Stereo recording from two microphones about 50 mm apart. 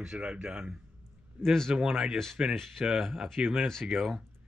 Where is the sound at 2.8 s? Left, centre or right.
Right.